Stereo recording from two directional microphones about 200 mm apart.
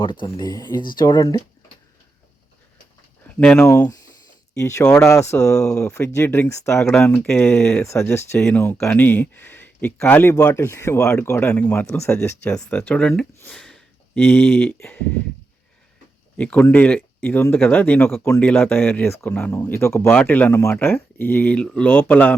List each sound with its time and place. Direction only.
0.0 s speech: 25° left (ahead or behind)
3.2 s speech: 5° left (ahead or behind)
4.9 s speech: 5° left (ahead or behind)
16.4 s speech: 10° left (ahead or behind)